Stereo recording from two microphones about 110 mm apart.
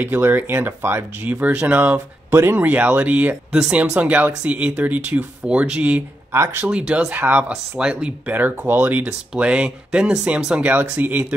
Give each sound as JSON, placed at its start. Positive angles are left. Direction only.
{"t": 0.0, "sound": "speech", "side_deg": -15}
{"t": 6.3, "sound": "speech", "side_deg": -25}
{"t": 6.6, "sound": "speech", "side_deg": -10}